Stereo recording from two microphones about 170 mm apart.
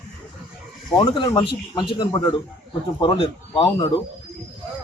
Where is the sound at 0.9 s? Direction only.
20° left (ahead or behind).